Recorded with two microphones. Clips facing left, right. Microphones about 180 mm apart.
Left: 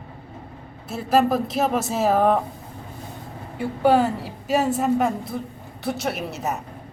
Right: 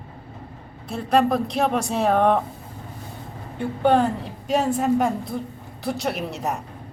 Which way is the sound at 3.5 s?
5° left (ahead or behind).